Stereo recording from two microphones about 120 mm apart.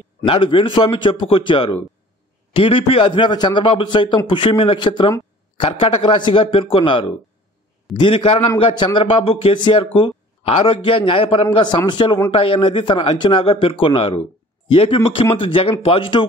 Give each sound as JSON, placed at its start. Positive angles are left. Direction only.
{"t": 0.3, "sound": "a man's voice", "side_deg": 45}